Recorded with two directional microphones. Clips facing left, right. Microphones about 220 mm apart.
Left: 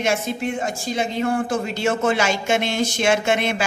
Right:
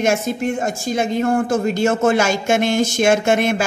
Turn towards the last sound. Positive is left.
turn(degrees=-45)  # may be behind; listen again after turning